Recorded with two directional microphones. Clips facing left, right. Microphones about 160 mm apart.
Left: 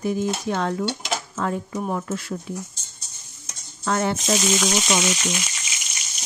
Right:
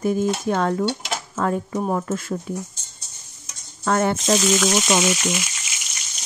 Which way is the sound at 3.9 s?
50° right (ahead or behind).